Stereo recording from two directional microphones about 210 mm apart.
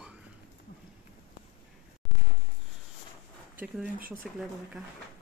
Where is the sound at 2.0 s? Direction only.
Centre (ahead or behind).